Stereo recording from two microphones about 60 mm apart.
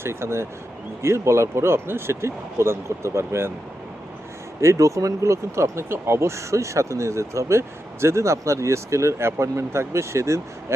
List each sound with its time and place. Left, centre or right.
0.0 s speech: right
4.6 s speech: right